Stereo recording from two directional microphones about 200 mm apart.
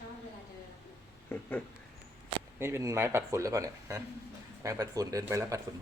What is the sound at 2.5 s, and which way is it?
Speech, 10° right (ahead or behind).